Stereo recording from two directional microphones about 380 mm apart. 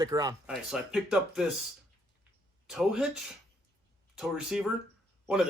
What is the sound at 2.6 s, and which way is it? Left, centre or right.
Speech, centre.